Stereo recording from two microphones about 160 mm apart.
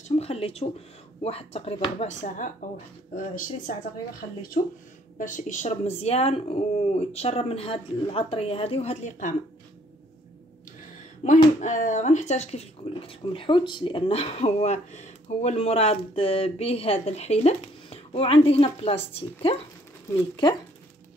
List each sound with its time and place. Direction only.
0.2 s speech: 40° left (ahead or behind); by 3.7 s 55° left (ahead or behind)
5.2 s speech: 50° left (ahead or behind)
11.2 s speech: 50° left (ahead or behind); by 19.5 s 35° left (ahead or behind)